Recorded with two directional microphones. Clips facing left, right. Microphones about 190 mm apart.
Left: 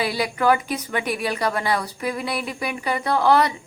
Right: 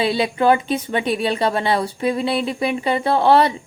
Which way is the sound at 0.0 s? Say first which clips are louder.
Right 4 dB; 25° right (ahead or behind).